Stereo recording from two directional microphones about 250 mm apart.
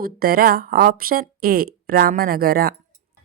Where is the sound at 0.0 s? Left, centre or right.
Right.